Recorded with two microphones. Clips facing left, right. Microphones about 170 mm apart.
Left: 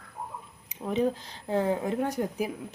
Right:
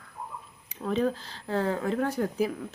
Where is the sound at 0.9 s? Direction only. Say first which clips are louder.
Even; 15° left (ahead or behind).